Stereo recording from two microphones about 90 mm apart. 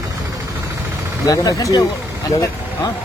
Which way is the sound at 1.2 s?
40° left (ahead or behind).